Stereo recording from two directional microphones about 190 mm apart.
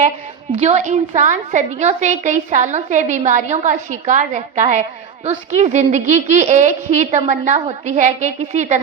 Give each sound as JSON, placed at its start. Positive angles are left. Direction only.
{"t": 0.5, "sound": "a woman's voice", "side_deg": -35}